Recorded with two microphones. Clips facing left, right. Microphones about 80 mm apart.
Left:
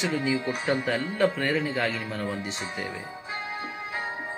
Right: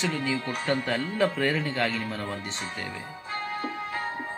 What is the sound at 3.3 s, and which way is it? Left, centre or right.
Keyboard, centre.